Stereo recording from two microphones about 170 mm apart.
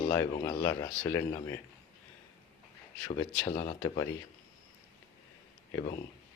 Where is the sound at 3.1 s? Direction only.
20° left (ahead or behind).